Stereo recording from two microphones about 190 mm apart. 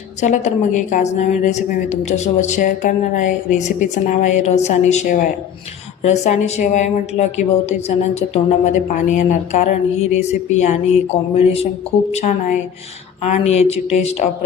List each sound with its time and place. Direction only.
0.2 s a woman's voice: 40° left (ahead or behind)